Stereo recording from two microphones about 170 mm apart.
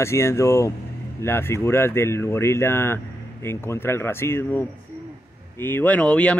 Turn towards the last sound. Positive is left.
turn(degrees=5)  # may be behind; listen again after turning